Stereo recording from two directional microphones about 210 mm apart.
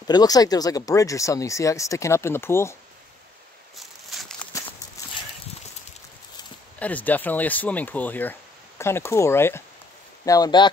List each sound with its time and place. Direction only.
0.0 s speech: 20° left (ahead or behind)
3.7 s a sound: centre (ahead or behind)
6.8 s speech: 5° left (ahead or behind)